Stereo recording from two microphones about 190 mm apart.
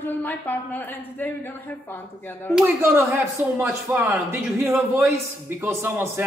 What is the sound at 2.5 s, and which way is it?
Speech, 10° right (ahead or behind).